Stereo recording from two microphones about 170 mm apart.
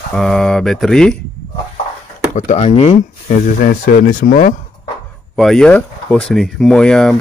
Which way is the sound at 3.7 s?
55° left (ahead or behind).